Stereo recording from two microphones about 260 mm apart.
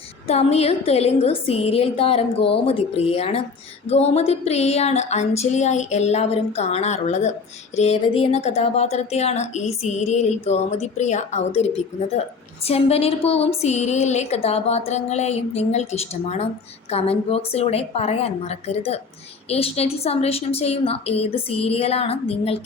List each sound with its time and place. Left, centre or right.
0.3 s a woman's voice: left